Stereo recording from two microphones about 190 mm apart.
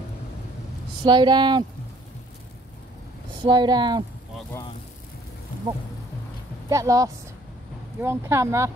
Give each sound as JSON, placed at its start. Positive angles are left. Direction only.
{"t": 1.0, "sound": "speech", "side_deg": -25}
{"t": 3.4, "sound": "speech", "side_deg": -20}
{"t": 6.7, "sound": "speech", "side_deg": -15}